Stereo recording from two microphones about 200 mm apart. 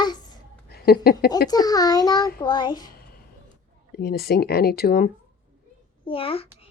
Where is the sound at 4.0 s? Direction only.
50° left (ahead or behind).